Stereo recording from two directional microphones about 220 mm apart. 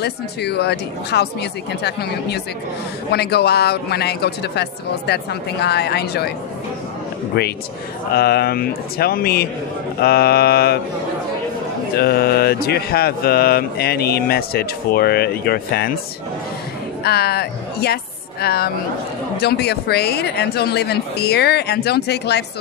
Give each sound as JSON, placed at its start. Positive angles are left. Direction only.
{"t": 0.0, "sound": "mantra", "side_deg": 50}
{"t": 7.3, "sound": "mantra", "side_deg": 45}
{"t": 12.0, "sound": "mantra", "side_deg": 45}
{"t": 17.0, "sound": "speech", "side_deg": 45}
{"t": 18.4, "sound": "mantra", "side_deg": 45}